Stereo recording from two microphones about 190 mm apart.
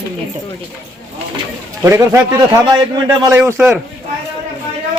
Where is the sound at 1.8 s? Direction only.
15° right (ahead or behind).